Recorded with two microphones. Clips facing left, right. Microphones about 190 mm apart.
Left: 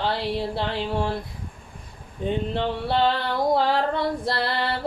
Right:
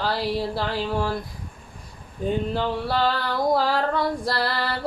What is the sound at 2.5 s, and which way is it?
Mantra, 25° left (ahead or behind).